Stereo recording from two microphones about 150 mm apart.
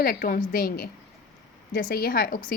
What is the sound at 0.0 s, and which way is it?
A woman's voice, 80° left.